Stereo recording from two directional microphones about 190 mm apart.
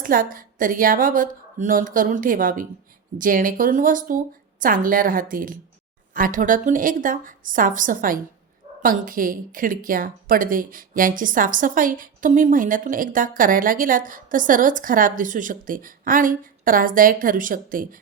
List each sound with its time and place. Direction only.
0.0 s a woman's voice: 45° right (ahead or behind)